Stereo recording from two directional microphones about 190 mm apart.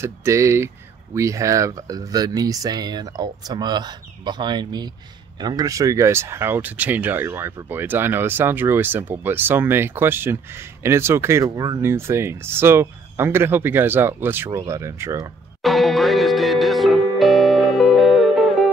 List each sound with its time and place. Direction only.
0.0 s speech: 15° right (ahead or behind)
15.6 s music: centre (ahead or behind)